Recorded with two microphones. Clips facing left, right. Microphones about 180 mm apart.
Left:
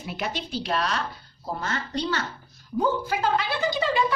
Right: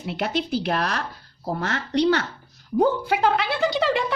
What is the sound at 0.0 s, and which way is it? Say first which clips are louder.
A woman's voice: right 6 dB; 65° right (ahead or behind).